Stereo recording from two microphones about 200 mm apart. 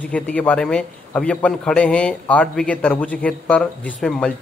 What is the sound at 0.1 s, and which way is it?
A man's voice, 5° left (ahead or behind).